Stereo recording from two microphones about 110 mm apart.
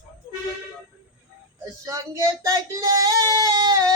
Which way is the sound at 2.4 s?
30° right (ahead or behind).